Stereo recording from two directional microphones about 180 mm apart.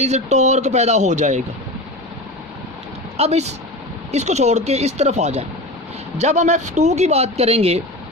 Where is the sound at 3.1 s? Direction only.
35° right (ahead or behind).